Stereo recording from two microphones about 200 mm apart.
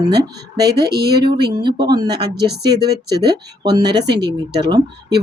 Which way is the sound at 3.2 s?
20° right (ahead or behind).